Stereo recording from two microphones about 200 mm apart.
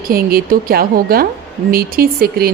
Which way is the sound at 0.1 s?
50° right (ahead or behind).